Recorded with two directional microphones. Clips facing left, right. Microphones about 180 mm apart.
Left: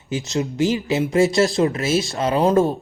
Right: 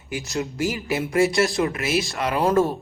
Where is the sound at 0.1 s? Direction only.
20° left (ahead or behind).